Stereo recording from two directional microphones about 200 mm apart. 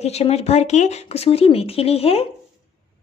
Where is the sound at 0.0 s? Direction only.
30° left (ahead or behind).